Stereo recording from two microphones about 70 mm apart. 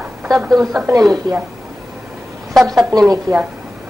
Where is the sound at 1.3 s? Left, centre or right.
Right.